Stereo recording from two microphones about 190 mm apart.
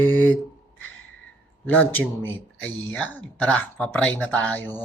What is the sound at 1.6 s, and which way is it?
Speech, 10° left (ahead or behind).